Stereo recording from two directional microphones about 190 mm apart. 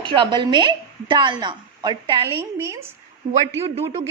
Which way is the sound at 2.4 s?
10° right (ahead or behind).